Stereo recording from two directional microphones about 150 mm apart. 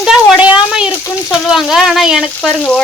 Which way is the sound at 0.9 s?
15° left (ahead or behind).